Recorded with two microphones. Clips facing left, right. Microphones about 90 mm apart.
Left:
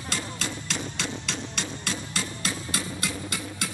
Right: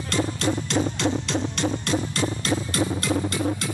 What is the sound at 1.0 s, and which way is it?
Music, centre (ahead or behind).